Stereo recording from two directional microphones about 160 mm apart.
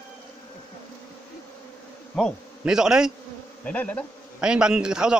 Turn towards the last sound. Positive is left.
turn(degrees=-5)  # may be behind; listen again after turning